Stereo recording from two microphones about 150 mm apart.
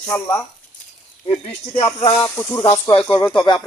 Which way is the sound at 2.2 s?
15° left (ahead or behind).